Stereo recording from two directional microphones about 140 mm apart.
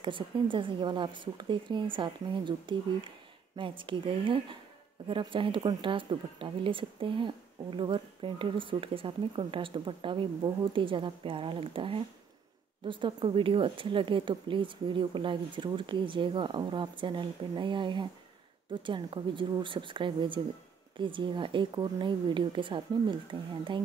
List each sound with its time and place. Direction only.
0.0 s speech: 35° right (ahead or behind)